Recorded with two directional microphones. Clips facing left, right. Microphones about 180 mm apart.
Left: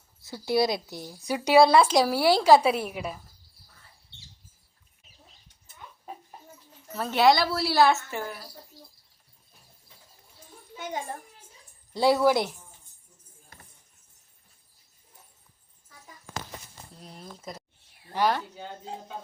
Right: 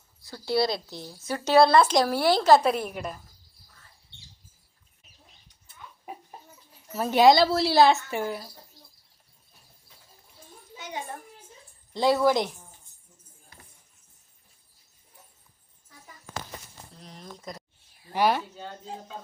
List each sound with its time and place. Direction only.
0.2 s speech: 20° left (ahead or behind)
6.9 s a woman's voice: 10° right (ahead or behind)
10.8 s a child's voice: 50° left (ahead or behind)
11.9 s speech: 10° left (ahead or behind)
17.0 s speech: 5° left (ahead or behind)
18.1 s speech: 10° right (ahead or behind)